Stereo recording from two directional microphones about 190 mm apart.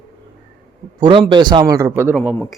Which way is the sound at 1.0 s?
25° right (ahead or behind).